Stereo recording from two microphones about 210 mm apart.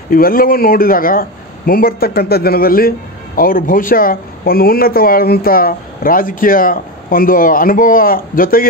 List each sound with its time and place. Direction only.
0.1 s speech: 45° left (ahead or behind)